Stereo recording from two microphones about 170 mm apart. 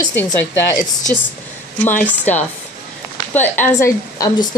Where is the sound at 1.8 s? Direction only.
10° left (ahead or behind).